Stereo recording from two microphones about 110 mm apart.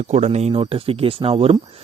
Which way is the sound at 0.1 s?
90° right.